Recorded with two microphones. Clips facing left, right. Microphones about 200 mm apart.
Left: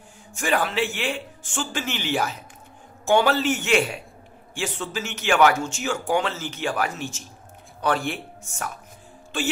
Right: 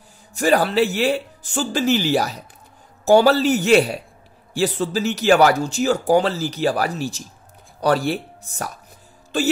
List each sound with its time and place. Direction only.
0.3 s speech: 40° right (ahead or behind)